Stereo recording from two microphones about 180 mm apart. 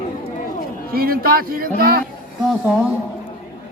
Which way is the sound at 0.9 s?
55° right (ahead or behind).